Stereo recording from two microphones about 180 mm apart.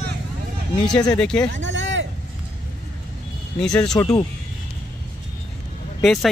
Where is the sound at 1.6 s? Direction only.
90° right.